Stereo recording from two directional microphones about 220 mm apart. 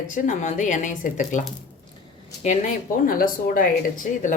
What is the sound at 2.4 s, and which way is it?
Speech, 40° left (ahead or behind).